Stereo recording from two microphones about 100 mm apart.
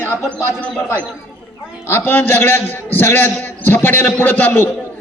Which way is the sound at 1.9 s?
20° left (ahead or behind).